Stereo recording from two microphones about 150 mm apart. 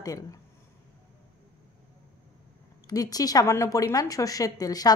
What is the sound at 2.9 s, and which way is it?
A woman's voice, 25° left (ahead or behind).